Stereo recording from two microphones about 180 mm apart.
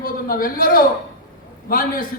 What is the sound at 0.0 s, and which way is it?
A man's voice, 50° left (ahead or behind).